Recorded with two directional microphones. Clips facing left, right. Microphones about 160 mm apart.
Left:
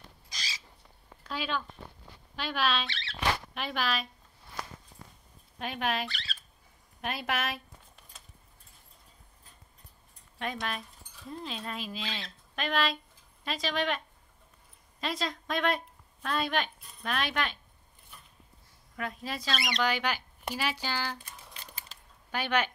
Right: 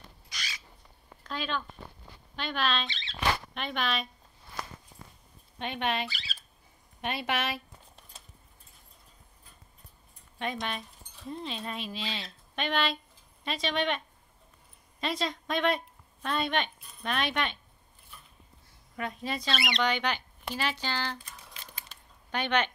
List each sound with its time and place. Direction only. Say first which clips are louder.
1.2 s a sound: even; 10° left (ahead or behind)
2.3 s speech: even; 5° left (ahead or behind)
2.9 s rodents: left 2 dB; 15° right (ahead or behind)
3.5 s speech: even; 5° left (ahead or behind)
5.6 s speech: right 1 dB; centre (ahead or behind)
10.4 s a woman's voice: right 1 dB; centre (ahead or behind)
18.9 s speech: right 2 dB; centre (ahead or behind)